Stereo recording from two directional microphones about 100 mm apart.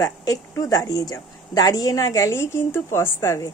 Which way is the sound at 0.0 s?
35° left (ahead or behind).